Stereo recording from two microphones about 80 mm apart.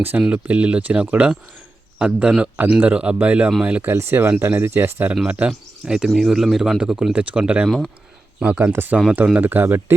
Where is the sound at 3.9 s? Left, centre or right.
Right.